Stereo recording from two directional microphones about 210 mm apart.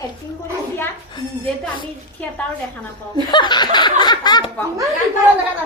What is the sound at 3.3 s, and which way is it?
Speech, 20° left (ahead or behind).